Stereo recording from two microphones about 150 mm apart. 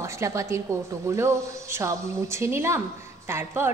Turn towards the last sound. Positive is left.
turn(degrees=-15)  # may be behind; listen again after turning